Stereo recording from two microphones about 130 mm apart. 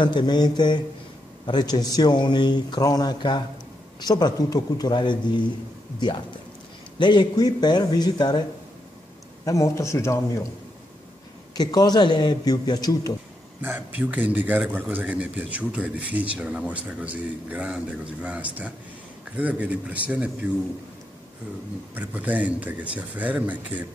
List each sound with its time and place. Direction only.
0.0 s a man's voice: 35° left (ahead or behind)
7.0 s a man's voice: 35° left (ahead or behind)
11.5 s a man's voice: 30° left (ahead or behind)
13.6 s speech: 15° right (ahead or behind)
21.9 s speech: 10° right (ahead or behind)